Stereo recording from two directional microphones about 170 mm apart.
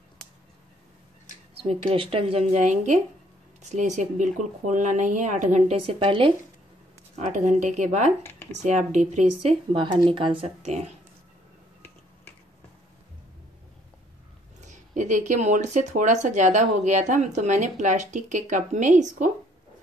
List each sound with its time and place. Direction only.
1.6 s speech: 35° right (ahead or behind)
7.2 s speech: 45° right (ahead or behind)
8.2 s a sound: 10° left (ahead or behind)
8.5 s speech: 45° right (ahead or behind)
14.6 s speech: 45° right (ahead or behind)